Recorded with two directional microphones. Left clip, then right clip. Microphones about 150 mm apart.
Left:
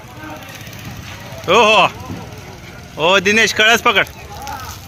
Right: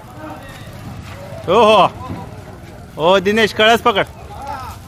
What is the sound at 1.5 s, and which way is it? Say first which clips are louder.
Speech: even; 15° right (ahead or behind).